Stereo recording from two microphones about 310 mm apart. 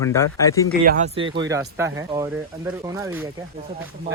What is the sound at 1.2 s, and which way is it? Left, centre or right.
Speech, centre.